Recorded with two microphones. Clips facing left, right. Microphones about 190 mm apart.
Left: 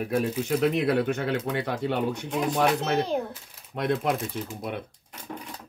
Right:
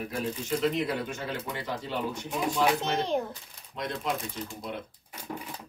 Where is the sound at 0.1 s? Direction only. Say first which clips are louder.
Left 7 dB; 65° left (ahead or behind).